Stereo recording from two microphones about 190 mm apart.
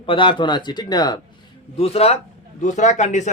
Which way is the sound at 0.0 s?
25° left (ahead or behind).